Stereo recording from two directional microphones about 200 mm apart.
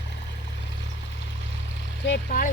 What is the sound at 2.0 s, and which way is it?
Vehicle, 50° left (ahead or behind).